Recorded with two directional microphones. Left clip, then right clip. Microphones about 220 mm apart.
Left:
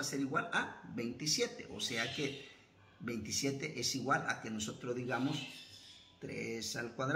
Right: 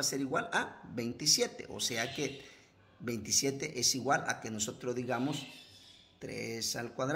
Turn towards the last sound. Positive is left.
turn(degrees=-50)  # may be behind; listen again after turning